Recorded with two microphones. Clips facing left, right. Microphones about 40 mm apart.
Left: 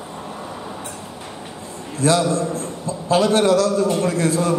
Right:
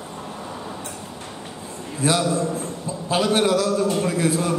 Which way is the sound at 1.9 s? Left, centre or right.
Centre.